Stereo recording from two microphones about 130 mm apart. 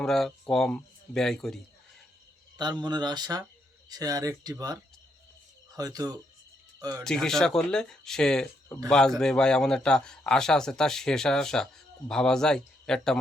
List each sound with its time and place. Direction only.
0.0 s speech: 5° left (ahead or behind)
2.6 s speech: 35° right (ahead or behind)
7.0 s a man's voice: 5° left (ahead or behind)